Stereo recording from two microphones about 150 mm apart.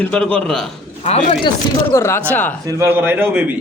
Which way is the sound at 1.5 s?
20° left (ahead or behind).